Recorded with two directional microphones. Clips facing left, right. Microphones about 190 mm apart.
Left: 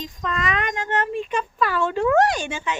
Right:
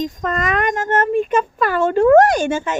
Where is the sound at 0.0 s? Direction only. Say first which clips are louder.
Right 6 dB; 45° right (ahead or behind).